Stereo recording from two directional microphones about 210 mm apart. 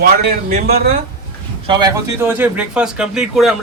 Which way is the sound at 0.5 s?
50° right (ahead or behind).